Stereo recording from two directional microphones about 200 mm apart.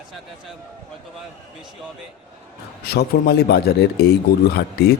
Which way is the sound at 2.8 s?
55° left (ahead or behind).